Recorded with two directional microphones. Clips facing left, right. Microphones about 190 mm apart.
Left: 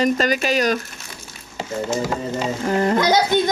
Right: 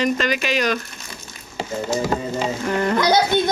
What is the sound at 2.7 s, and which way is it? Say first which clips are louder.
Speech: left 2 dB; 30° left (ahead or behind).